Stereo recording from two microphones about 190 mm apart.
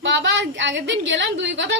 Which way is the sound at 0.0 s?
70° right (ahead or behind).